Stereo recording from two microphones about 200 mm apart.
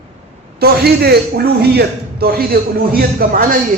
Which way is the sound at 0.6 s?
50° right (ahead or behind).